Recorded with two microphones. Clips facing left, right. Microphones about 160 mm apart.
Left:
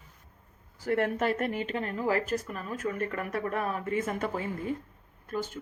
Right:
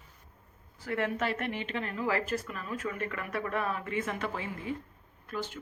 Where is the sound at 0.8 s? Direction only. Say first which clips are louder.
Left 4 dB; 45° left (ahead or behind).